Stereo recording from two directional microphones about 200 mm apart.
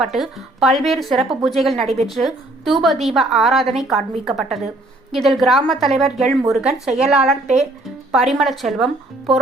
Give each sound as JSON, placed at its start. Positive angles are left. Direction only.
{"t": 0.0, "sound": "a woman's voice", "side_deg": 0}